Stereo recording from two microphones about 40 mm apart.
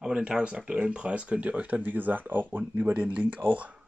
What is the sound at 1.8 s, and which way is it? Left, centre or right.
Speech, right.